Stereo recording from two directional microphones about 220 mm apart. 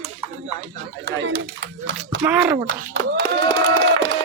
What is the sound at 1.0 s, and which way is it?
Speech, 55° right (ahead or behind).